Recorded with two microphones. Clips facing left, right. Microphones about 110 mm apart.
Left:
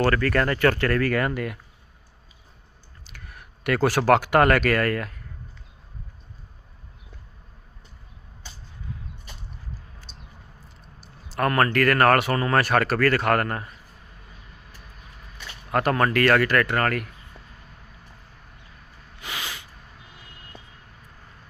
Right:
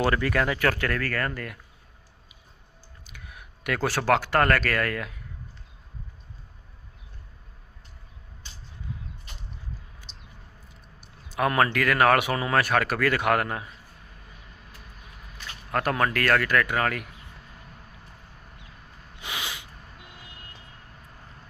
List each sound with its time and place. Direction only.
0.0 s speech: 15° right (ahead or behind)
1.0 s speech: 10° left (ahead or behind)
3.1 s speech: centre (ahead or behind)
11.3 s speech: 5° right (ahead or behind)
15.7 s speech: centre (ahead or behind)
19.2 s a sound: 20° right (ahead or behind)